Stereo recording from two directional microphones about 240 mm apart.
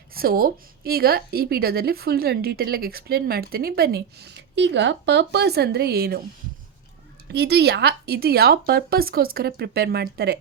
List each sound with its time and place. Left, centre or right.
0.1 s a woman's voice: right
7.3 s a woman's voice: right